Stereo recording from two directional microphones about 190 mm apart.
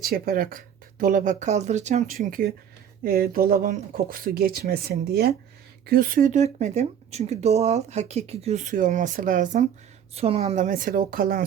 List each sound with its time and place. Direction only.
0.0 s speech: 50° right (ahead or behind)
2.1 s speech: 50° right (ahead or behind)